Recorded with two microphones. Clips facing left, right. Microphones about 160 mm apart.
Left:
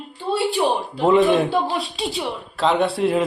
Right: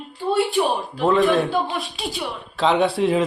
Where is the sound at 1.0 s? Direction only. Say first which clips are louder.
Left 2 dB; 25° left (ahead or behind).